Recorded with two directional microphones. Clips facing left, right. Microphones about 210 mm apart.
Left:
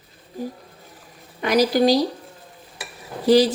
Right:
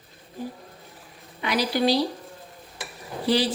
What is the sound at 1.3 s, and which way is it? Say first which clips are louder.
Speech: left 7 dB; 45° left (ahead or behind).